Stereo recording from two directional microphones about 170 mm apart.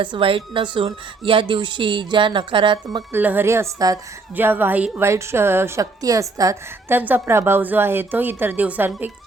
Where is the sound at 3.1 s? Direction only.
10° right (ahead or behind).